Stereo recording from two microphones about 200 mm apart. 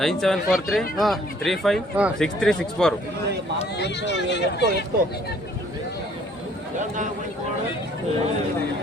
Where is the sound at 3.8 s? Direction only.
60° left (ahead or behind).